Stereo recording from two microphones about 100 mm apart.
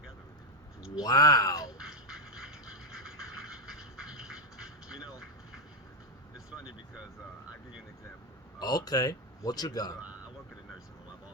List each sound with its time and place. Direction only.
1.0 s a man's voice: 40° left (ahead or behind)
1.6 s music: 5° right (ahead or behind)
6.3 s vehicle: 10° right (ahead or behind)
8.5 s a man's voice: 40° left (ahead or behind)